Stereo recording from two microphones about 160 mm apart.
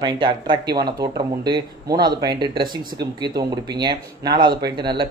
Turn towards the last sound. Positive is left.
turn(degrees=-30)  # may be behind; listen again after turning